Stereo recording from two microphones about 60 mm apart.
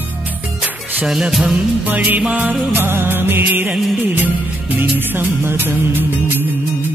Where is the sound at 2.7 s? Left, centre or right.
Right.